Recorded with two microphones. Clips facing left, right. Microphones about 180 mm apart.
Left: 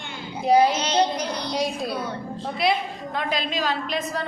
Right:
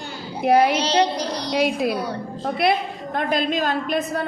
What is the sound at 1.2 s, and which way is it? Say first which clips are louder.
Female singing: right 2 dB; 35° right (ahead or behind).